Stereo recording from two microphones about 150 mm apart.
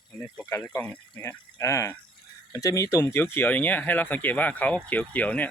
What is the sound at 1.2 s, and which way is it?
Speech, 25° left (ahead or behind).